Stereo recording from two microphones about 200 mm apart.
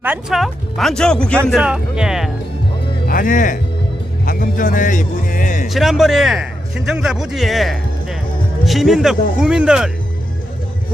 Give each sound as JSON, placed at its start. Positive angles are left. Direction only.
{"t": 0.0, "sound": "speech", "side_deg": -5}
{"t": 3.1, "sound": "a man's voice", "side_deg": 40}
{"t": 5.6, "sound": "speech", "side_deg": 0}